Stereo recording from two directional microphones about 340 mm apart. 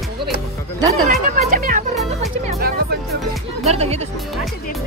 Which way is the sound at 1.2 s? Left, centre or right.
Right.